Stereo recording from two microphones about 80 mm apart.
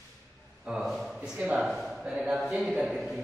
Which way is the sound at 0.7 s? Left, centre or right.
Centre.